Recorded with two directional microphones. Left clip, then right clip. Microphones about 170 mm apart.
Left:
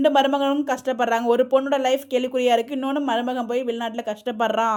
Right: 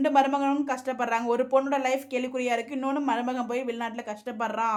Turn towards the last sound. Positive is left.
turn(degrees=40)  # may be behind; listen again after turning